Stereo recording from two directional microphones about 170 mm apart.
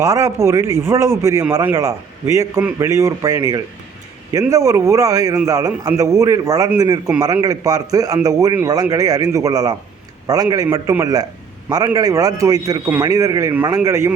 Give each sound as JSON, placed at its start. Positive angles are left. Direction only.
{"t": 0.0, "sound": "speech", "side_deg": -20}